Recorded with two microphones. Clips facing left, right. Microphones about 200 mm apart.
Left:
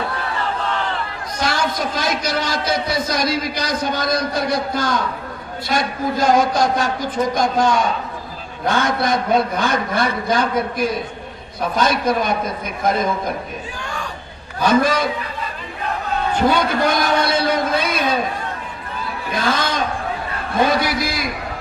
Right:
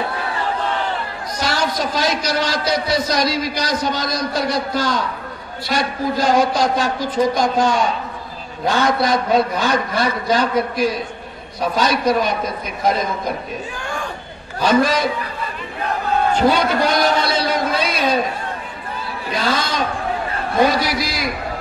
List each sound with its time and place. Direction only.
1.4 s a man's voice: 50° left (ahead or behind)
8.6 s a man's voice: 55° left (ahead or behind)
14.6 s a man's voice: 50° left (ahead or behind)
16.4 s a man's voice: 50° left (ahead or behind)
19.3 s a man's voice: 50° left (ahead or behind)